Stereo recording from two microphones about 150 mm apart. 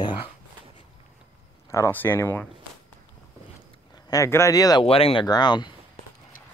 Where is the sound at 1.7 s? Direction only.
15° left (ahead or behind).